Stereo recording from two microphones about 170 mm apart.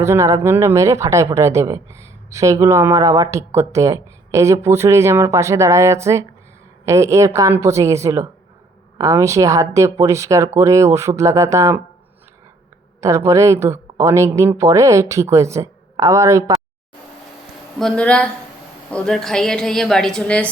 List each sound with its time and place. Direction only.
0.0 s a woman's voice: 15° right (ahead or behind)
13.0 s a woman's voice: 15° right (ahead or behind)
17.7 s a woman's voice: 5° left (ahead or behind)